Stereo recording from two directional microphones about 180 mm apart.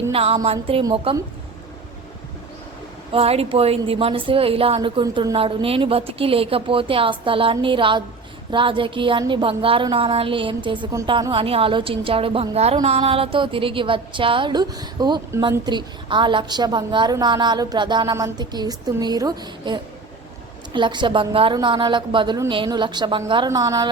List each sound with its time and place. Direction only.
0.1 s speech: 35° right (ahead or behind)
3.1 s a woman's voice: 35° right (ahead or behind)